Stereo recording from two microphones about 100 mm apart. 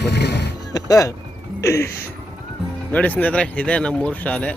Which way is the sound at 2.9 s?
15° left (ahead or behind).